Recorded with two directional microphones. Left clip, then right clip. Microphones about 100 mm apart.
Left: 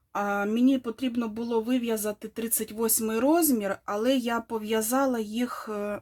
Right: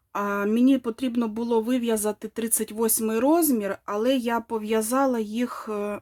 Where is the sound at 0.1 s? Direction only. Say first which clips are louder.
Right 2 dB; 20° right (ahead or behind).